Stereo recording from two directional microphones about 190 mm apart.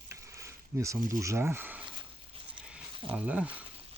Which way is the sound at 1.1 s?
15° right (ahead or behind).